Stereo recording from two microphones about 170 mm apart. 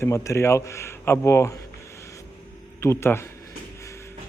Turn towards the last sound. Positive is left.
turn(degrees=15)  # may be behind; listen again after turning